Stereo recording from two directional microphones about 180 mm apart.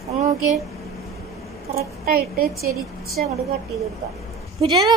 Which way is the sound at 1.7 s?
55° right (ahead or behind).